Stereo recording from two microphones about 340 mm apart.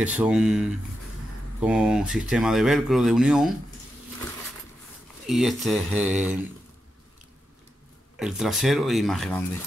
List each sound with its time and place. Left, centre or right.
0.0 s speech: centre
5.2 s speech: centre
8.2 s speech: centre